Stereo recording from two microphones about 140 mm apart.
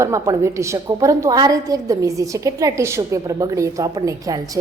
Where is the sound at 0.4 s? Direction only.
20° right (ahead or behind).